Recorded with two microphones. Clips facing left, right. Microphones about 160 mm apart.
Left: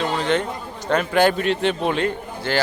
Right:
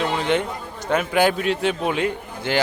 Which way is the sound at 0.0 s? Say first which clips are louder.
Even; 15° right (ahead or behind).